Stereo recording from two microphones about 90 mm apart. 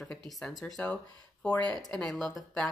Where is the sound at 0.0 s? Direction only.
5° left (ahead or behind).